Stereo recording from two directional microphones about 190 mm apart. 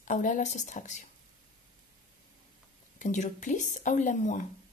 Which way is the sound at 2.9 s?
40° left (ahead or behind).